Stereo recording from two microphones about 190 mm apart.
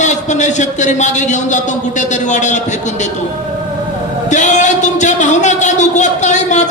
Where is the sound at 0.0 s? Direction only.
40° left (ahead or behind).